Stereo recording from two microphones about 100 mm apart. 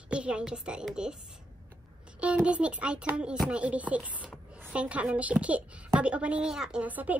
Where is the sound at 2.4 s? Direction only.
15° right (ahead or behind).